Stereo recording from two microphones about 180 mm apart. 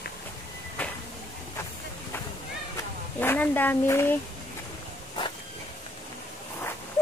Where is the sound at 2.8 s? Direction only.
10° left (ahead or behind).